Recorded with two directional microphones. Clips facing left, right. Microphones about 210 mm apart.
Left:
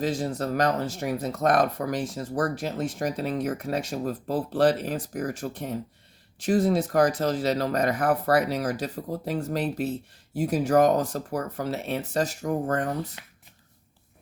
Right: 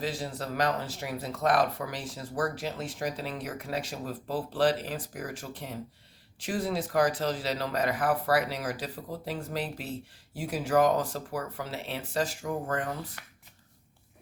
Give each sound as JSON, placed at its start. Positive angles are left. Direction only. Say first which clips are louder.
{"t": 0.0, "sound": "speech", "louder": "left 7 dB", "side_deg": 45}
{"t": 13.2, "sound": "speech", "louder": "left 2 dB", "side_deg": 25}